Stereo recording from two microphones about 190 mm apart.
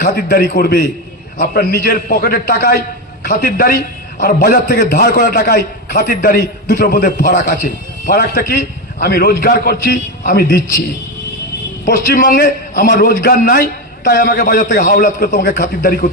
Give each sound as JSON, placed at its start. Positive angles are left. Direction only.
{"t": 0.0, "sound": "a man's voice", "side_deg": 55}
{"t": 11.9, "sound": "a man's voice", "side_deg": 50}